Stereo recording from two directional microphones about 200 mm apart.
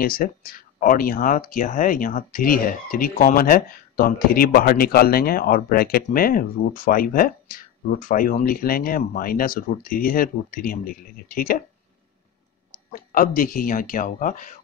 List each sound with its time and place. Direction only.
0.0 s speech: 45° left (ahead or behind)
12.9 s speech: 45° left (ahead or behind)